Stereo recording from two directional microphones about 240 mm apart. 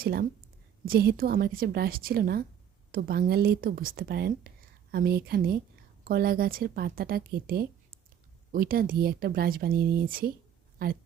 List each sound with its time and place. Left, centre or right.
0.0 s speech: right